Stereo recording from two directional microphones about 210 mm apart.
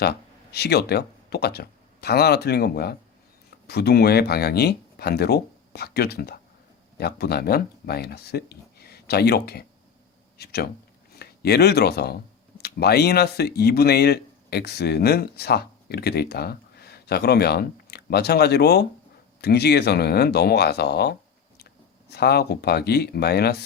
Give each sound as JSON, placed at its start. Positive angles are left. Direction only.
{"t": 0.0, "sound": "speech", "side_deg": 50}